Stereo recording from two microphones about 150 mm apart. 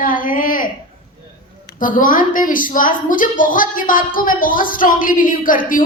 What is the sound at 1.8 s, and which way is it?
A woman's voice, 65° left (ahead or behind).